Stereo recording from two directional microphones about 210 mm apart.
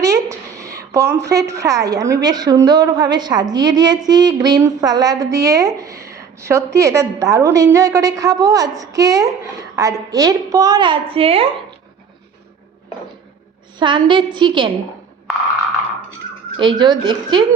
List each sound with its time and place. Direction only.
0.0 s a sound: 15° right (ahead or behind)
0.8 s a woman's voice: 15° right (ahead or behind)
13.7 s a woman's voice: 20° right (ahead or behind)
16.6 s a woman's voice: 20° right (ahead or behind)